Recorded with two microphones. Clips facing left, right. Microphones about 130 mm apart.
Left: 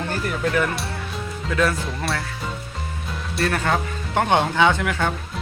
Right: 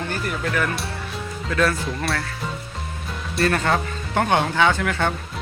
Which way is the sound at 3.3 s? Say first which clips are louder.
Right 2 dB; centre (ahead or behind).